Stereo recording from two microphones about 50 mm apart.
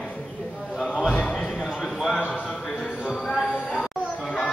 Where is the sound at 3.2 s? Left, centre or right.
Centre.